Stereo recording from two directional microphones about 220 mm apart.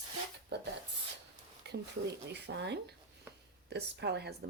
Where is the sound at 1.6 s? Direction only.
50° right (ahead or behind).